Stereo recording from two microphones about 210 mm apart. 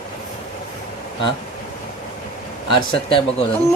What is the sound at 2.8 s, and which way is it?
Speech, 25° left (ahead or behind).